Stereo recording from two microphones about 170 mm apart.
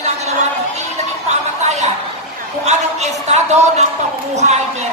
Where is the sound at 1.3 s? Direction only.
40° right (ahead or behind).